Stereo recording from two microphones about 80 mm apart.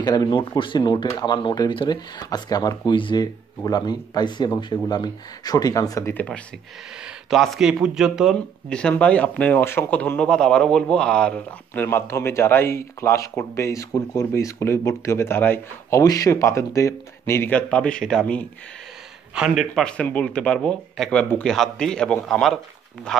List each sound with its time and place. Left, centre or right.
0.0 s speech: left
7.2 s speech: centre
8.6 s speech: centre
11.7 s speech: left
16.0 s speech: left
17.5 s speech: centre
19.3 s speech: centre
19.8 s speech: centre